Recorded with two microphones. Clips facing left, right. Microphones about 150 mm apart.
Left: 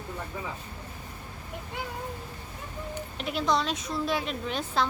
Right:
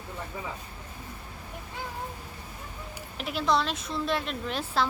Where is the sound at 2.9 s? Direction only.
Centre (ahead or behind).